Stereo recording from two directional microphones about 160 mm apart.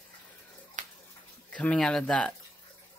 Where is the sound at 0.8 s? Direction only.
50° right (ahead or behind).